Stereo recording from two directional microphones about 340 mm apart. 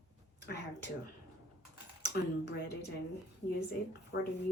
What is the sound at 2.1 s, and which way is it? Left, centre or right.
Speech, left.